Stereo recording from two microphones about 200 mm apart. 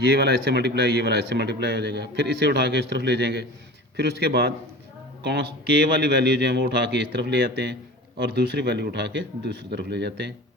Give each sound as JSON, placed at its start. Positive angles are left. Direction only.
{"t": 0.0, "sound": "speech", "side_deg": -50}